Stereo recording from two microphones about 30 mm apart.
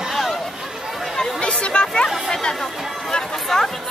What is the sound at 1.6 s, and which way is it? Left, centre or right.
Speech, left.